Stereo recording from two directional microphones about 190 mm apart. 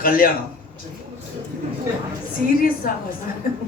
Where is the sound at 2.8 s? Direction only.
50° left (ahead or behind).